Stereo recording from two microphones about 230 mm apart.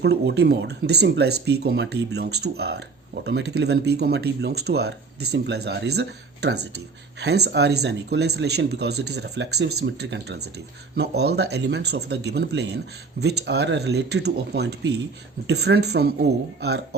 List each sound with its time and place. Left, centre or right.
0.0 s speech: right